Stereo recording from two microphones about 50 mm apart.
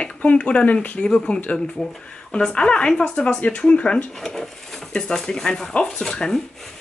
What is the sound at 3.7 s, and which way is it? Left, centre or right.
Speech, centre.